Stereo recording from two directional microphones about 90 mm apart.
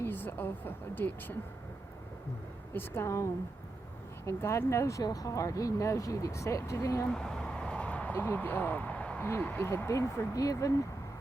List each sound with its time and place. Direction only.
0.0 s speech: 25° left (ahead or behind)
2.7 s speech: 30° left (ahead or behind)
4.3 s speech: 30° left (ahead or behind)
7.1 s a sound: 5° left (ahead or behind)
9.2 s speech: 20° left (ahead or behind); by 10.8 s 40° left (ahead or behind)